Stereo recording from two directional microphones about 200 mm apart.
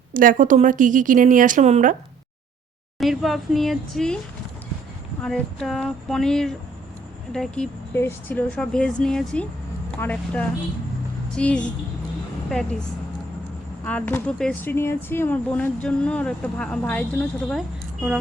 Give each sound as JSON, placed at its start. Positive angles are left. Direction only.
{"t": 0.1, "sound": "speech", "side_deg": -40}
{"t": 3.0, "sound": "speech", "side_deg": 0}
{"t": 5.2, "sound": "speech", "side_deg": 5}
{"t": 13.8, "sound": "speech", "side_deg": 5}